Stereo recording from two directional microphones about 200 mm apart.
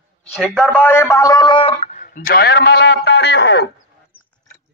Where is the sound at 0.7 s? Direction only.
10° left (ahead or behind); by 3.7 s 60° left (ahead or behind).